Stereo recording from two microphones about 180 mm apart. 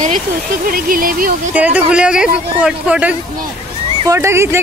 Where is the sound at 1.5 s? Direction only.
5° right (ahead or behind).